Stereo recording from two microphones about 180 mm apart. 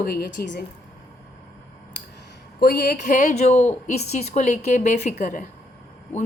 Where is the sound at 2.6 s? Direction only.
60° left (ahead or behind).